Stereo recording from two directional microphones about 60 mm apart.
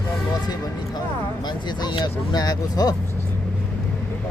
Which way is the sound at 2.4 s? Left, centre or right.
Left.